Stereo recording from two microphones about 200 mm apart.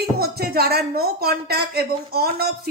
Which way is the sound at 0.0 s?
50° right (ahead or behind).